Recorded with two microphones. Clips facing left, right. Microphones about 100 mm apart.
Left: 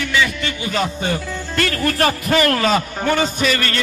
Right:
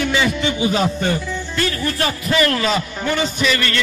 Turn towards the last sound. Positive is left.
turn(degrees=40)  # may be behind; listen again after turning